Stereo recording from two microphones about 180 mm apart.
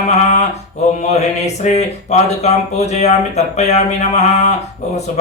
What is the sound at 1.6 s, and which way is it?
Speech, 40° left (ahead or behind).